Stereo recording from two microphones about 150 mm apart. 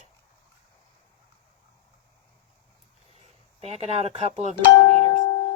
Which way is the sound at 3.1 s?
45° right (ahead or behind).